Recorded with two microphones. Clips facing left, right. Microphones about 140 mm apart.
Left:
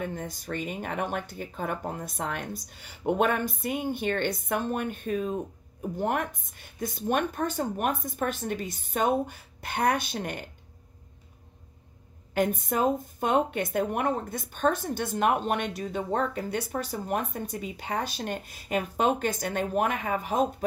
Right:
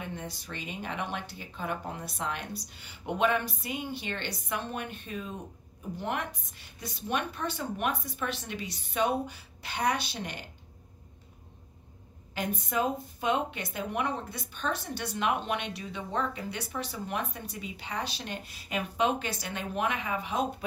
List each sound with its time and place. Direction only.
0.0 s speech: 45° left (ahead or behind)
12.4 s speech: 50° left (ahead or behind)